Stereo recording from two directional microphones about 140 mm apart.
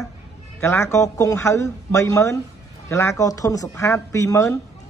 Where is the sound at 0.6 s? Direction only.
20° left (ahead or behind).